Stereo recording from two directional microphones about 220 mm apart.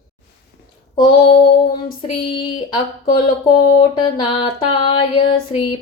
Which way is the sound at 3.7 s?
20° left (ahead or behind).